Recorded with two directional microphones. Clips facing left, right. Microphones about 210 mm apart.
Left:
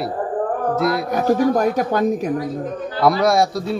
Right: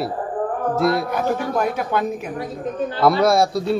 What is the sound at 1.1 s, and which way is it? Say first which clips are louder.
A woman's voice: left 5 dB; 40° left (ahead or behind).